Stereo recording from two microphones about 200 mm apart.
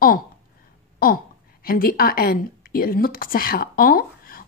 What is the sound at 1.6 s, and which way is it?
A woman's voice, 45° left (ahead or behind).